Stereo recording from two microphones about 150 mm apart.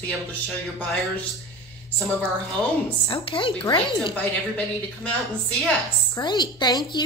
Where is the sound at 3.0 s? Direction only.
35° left (ahead or behind).